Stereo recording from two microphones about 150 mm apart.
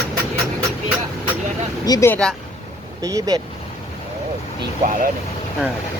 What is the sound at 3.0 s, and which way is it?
Speech, 25° right (ahead or behind).